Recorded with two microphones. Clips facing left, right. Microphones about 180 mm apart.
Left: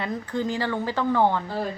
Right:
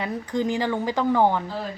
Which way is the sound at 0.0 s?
15° right (ahead or behind).